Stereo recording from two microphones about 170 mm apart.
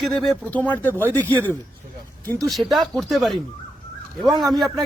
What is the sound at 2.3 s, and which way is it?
Speech, 5° left (ahead or behind).